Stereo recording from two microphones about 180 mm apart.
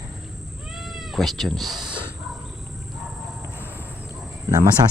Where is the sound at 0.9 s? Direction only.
Centre (ahead or behind).